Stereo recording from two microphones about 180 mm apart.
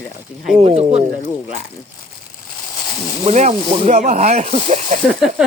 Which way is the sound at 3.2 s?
40° right (ahead or behind).